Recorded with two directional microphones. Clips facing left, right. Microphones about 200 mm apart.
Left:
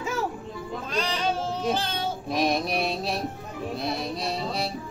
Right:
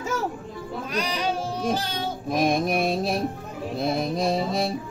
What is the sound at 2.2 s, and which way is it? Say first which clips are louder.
Music: right 4 dB; 50° right (ahead or behind).